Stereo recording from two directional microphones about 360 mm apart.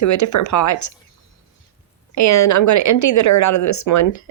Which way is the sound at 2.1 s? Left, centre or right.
Left.